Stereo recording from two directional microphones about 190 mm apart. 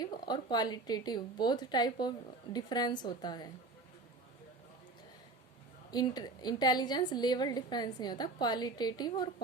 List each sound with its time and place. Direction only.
0.0 s speech: 20° left (ahead or behind)
5.9 s speech: 20° left (ahead or behind)